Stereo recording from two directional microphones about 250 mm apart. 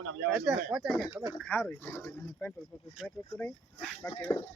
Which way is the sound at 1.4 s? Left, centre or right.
Centre.